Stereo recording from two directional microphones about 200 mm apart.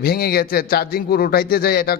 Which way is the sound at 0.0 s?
50° left (ahead or behind).